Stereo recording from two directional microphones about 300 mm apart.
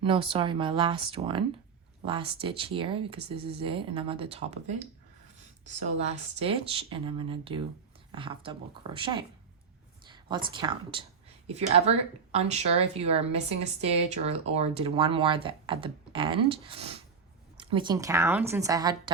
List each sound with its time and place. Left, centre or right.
0.0 s a woman's voice: centre
6.0 s a woman's voice: centre